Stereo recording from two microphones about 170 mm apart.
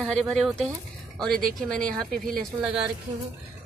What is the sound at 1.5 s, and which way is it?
Speech, 5° left (ahead or behind).